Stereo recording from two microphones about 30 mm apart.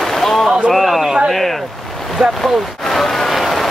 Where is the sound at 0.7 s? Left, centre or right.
Centre.